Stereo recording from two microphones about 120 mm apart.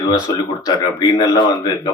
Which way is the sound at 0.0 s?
35° left (ahead or behind).